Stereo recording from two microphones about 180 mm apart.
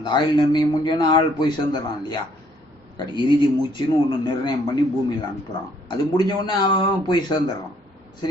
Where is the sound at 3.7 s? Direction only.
25° left (ahead or behind).